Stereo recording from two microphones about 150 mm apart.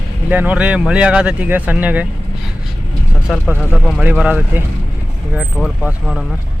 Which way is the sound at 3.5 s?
5° right (ahead or behind).